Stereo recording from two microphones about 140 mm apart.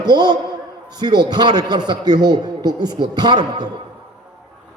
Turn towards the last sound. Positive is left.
turn(degrees=-30)  # may be behind; listen again after turning